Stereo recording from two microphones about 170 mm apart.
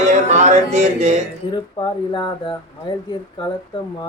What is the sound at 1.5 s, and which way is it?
Speech, 25° left (ahead or behind).